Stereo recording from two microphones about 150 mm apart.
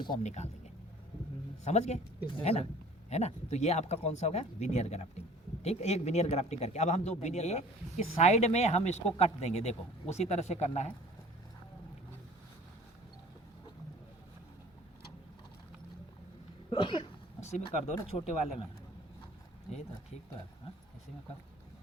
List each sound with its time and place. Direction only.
0.2 s speech: 50° left (ahead or behind)
1.6 s speech: 50° left (ahead or behind)
16.6 s a sound: 35° left (ahead or behind)
17.4 s speech: 50° left (ahead or behind)